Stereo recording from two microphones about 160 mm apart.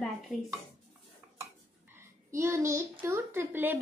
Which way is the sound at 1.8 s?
15° right (ahead or behind).